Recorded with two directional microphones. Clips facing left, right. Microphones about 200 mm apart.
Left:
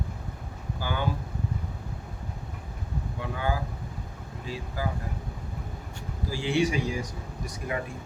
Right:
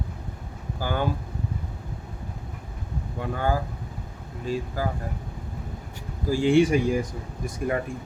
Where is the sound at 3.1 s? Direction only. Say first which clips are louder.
Right 5 dB; 45° right (ahead or behind).